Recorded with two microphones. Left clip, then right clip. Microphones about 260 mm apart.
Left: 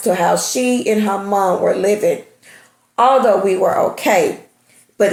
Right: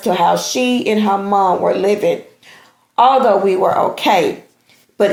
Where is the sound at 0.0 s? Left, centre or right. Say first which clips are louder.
Right 1 dB; right.